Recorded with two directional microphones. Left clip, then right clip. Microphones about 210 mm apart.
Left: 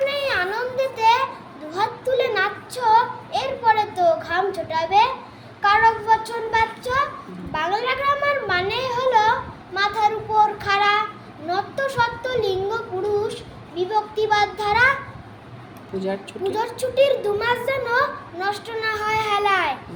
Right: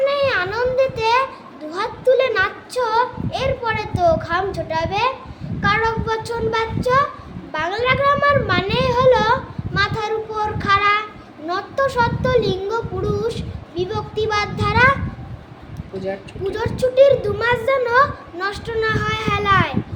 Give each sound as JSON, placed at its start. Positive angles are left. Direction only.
{"t": 0.0, "sound": "a sound", "side_deg": -15}
{"t": 5.6, "sound": "a child's voice", "side_deg": -10}
{"t": 11.4, "sound": "child singing", "side_deg": -15}
{"t": 16.0, "sound": "speech", "side_deg": 5}
{"t": 16.5, "sound": "a child's voice", "side_deg": -10}